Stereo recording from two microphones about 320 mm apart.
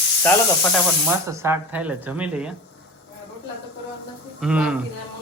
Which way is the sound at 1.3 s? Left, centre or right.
Centre.